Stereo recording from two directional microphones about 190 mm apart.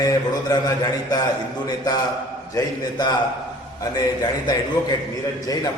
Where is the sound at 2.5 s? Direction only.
20° left (ahead or behind).